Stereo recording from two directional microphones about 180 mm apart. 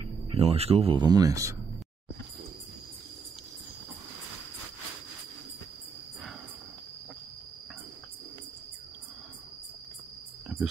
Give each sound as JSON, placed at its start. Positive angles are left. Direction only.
{"t": 0.3, "sound": "speech", "side_deg": -35}